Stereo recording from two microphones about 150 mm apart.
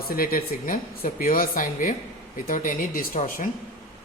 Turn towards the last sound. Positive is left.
turn(degrees=65)  # may be behind; listen again after turning